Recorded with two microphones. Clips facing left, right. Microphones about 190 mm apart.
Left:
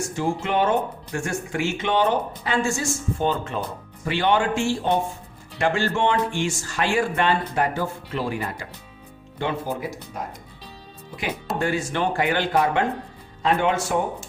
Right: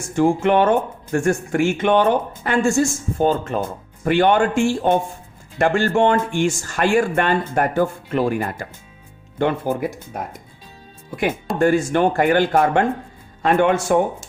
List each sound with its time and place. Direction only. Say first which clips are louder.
0.2 s speech: right 8 dB; 50° right (ahead or behind)
11.6 s speech: right 9 dB; 50° right (ahead or behind)